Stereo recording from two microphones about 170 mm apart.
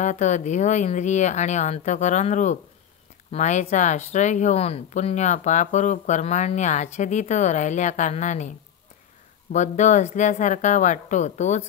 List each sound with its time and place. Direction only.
0.0 s speech: 45° left (ahead or behind)